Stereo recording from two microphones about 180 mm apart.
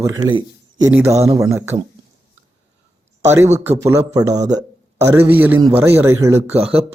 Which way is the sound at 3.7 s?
15° right (ahead or behind).